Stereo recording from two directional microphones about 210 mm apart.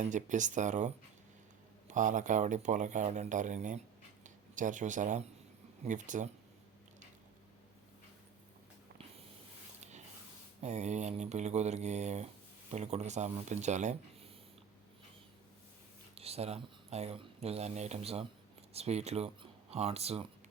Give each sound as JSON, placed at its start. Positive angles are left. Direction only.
{"t": 0.0, "sound": "speech", "side_deg": -35}
{"t": 1.9, "sound": "speech", "side_deg": -35}
{"t": 10.6, "sound": "speech", "side_deg": -30}
{"t": 16.1, "sound": "speech", "side_deg": -30}